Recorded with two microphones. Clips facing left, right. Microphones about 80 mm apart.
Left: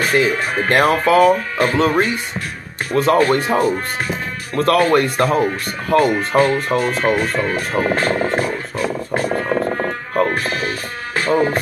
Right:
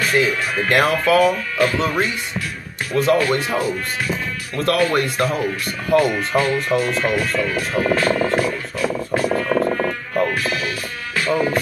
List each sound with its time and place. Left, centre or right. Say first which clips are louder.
0.0 s speech: left 2 dB; left